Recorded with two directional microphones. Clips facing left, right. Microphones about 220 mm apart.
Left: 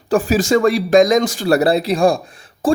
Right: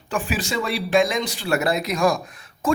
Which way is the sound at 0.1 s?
40° left (ahead or behind).